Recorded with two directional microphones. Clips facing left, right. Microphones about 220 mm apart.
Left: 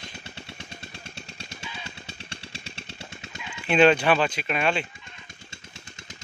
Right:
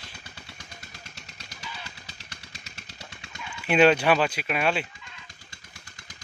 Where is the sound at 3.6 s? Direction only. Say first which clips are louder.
Left 1 dB; 10° right (ahead or behind).